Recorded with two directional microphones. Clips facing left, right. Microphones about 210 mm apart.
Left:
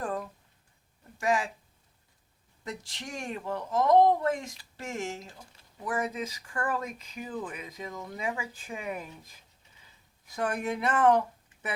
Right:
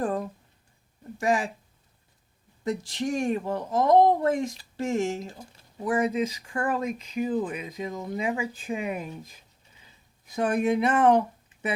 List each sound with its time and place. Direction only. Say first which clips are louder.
0.0 s a sound: right 6 dB; 30° right (ahead or behind)
1.2 s speech: right 3 dB; 35° right (ahead or behind)
2.6 s speech: right 12 dB; 35° right (ahead or behind); by 9.0 s 20° right (ahead or behind)
10.2 s speech: right 7 dB; 20° right (ahead or behind)